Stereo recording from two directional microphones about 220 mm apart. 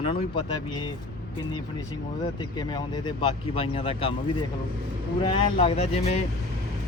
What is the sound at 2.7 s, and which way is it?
Speech, 20° left (ahead or behind).